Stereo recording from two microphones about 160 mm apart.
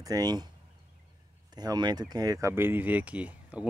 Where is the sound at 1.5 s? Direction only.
25° right (ahead or behind).